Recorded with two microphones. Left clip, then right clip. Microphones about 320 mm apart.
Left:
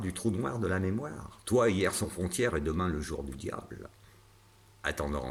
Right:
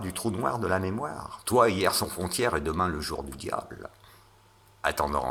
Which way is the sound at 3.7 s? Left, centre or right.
Right.